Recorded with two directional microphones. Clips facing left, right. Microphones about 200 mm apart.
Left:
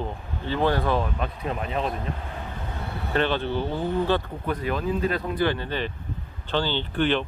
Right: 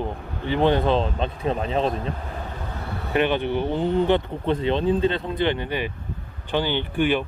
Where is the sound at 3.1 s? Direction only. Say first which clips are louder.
Right 3 dB; 15° right (ahead or behind).